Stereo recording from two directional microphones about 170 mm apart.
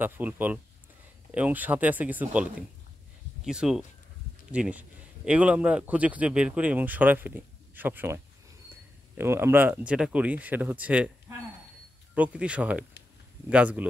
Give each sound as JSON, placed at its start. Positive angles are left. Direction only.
{"t": 0.0, "sound": "a man's voice", "side_deg": -10}